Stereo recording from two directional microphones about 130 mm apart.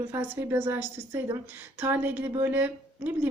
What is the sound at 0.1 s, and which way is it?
A woman's voice, 20° right (ahead or behind).